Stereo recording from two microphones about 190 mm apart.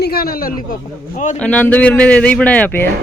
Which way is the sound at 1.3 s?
5° left (ahead or behind).